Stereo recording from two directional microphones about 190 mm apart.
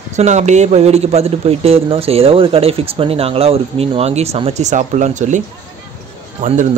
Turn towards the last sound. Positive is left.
turn(degrees=-45)  # may be behind; listen again after turning